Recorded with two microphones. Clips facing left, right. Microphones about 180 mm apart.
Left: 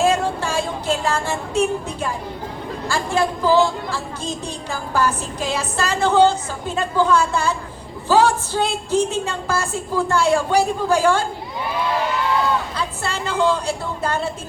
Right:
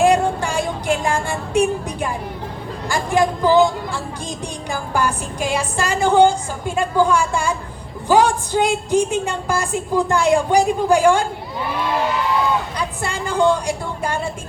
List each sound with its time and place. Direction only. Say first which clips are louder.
0.0 s a sound: right 3 dB; 15° right (ahead or behind)
2.9 s a woman's voice: right 3 dB; 15° right (ahead or behind)
12.7 s a woman's voice: right 1 dB; 15° right (ahead or behind)